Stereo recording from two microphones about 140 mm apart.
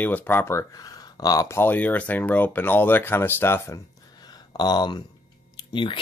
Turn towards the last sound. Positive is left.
turn(degrees=35)  # may be behind; listen again after turning